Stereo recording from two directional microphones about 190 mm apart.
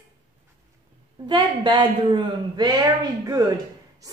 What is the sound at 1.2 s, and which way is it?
A woman's voice, 25° right (ahead or behind).